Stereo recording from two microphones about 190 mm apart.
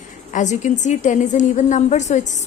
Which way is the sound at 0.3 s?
40° left (ahead or behind).